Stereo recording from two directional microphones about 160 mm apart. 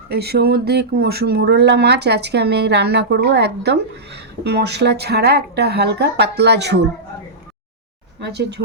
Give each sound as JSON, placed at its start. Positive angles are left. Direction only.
{"t": 0.1, "sound": "speech", "side_deg": -85}
{"t": 8.2, "sound": "speech", "side_deg": -90}